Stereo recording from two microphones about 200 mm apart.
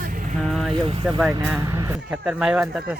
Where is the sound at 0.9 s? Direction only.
25° right (ahead or behind).